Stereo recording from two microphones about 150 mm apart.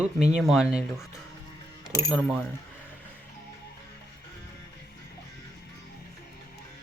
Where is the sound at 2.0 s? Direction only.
Centre (ahead or behind).